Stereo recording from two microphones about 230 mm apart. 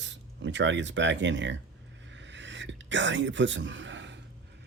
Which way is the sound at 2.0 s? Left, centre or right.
Right.